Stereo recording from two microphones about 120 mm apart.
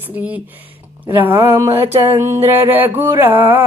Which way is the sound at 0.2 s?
10° right (ahead or behind).